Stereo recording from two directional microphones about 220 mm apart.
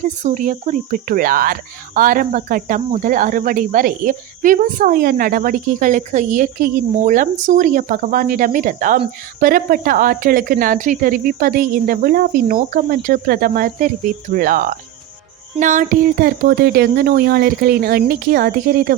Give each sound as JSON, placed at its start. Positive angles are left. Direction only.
{"t": 0.0, "sound": "speech", "side_deg": -35}